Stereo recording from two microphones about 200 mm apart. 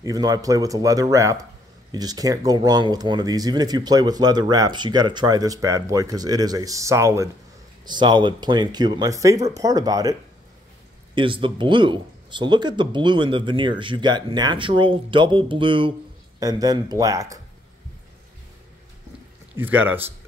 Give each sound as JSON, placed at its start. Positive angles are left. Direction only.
{"t": 0.0, "sound": "speech", "side_deg": -20}
{"t": 11.1, "sound": "speech", "side_deg": -25}
{"t": 19.5, "sound": "speech", "side_deg": -10}